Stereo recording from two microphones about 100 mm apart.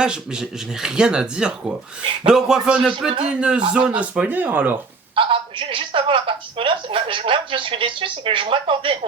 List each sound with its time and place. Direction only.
0.0 s speech: 10° right (ahead or behind)
5.1 s a woman's voice: 60° right (ahead or behind)